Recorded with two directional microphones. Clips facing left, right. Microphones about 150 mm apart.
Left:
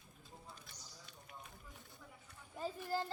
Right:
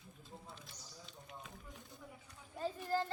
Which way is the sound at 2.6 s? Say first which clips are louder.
Right 3 dB; 5° left (ahead or behind).